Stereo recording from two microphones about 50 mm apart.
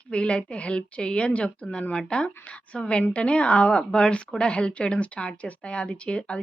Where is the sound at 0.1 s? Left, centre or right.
Centre.